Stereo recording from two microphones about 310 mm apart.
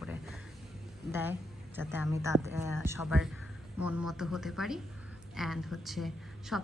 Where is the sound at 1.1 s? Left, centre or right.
Centre.